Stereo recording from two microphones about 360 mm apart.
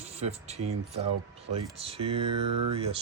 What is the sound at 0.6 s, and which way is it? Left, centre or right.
Speech, right.